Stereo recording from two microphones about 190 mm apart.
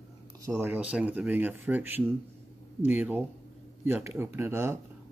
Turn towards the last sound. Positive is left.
turn(degrees=-15)  # may be behind; listen again after turning